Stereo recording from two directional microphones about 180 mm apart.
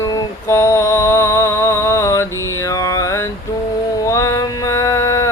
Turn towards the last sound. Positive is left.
turn(degrees=15)  # may be behind; listen again after turning